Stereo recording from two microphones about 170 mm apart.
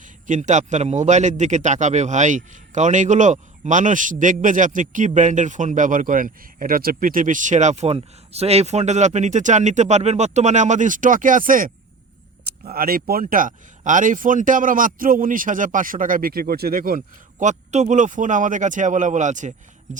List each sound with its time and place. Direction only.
0.0 s a man's voice: 45° right (ahead or behind)
17.4 s a man's voice: 45° right (ahead or behind)